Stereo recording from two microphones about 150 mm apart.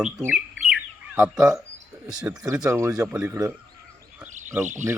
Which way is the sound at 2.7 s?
20° right (ahead or behind).